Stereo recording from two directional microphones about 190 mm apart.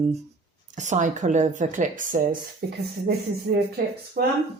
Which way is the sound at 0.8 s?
40° right (ahead or behind).